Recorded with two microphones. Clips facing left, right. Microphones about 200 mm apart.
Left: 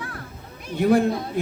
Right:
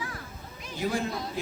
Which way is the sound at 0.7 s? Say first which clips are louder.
Left 11 dB; 60° left (ahead or behind).